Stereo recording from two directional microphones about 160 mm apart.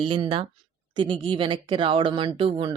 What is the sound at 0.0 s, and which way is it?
Speech, 30° right (ahead or behind).